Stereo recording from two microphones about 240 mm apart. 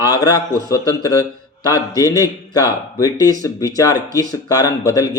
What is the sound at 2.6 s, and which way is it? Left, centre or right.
Speech, centre.